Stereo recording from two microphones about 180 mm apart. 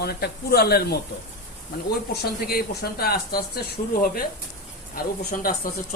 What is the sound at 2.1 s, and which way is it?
Speech, 60° left (ahead or behind).